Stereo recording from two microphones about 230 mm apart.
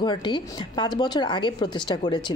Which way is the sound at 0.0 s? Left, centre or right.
Centre.